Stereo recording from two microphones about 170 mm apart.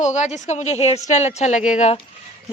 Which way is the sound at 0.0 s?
45° left (ahead or behind).